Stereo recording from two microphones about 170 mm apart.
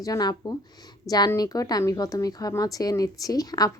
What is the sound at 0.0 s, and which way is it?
A woman's voice, 20° left (ahead or behind).